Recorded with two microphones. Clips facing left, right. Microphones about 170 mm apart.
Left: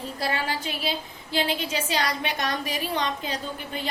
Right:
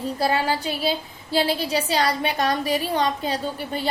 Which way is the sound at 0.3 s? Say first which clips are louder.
Right 5 dB; 35° right (ahead or behind).